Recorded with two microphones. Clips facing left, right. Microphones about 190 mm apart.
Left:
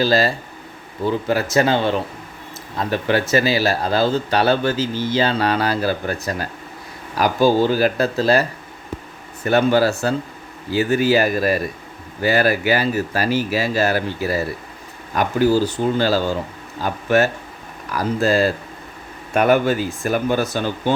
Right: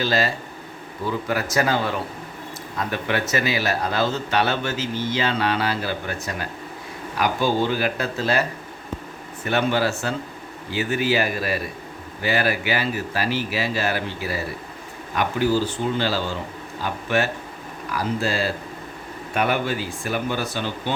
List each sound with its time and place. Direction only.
0.0 s a man's voice: 35° left (ahead or behind)
1.3 s a man's voice: 30° left (ahead or behind); by 20.9 s 45° left (ahead or behind)